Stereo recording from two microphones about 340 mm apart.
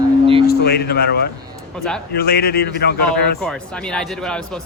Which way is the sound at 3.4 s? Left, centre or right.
Centre.